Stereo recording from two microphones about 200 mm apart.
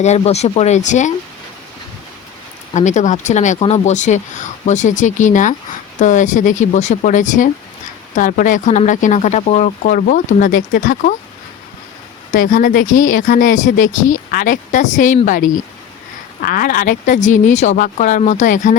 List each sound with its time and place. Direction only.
0.0 s speech: 35° left (ahead or behind)
2.7 s speech: 35° left (ahead or behind)
12.3 s speech: 40° left (ahead or behind)